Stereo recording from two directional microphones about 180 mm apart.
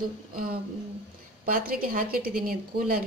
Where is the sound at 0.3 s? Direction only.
50° right (ahead or behind).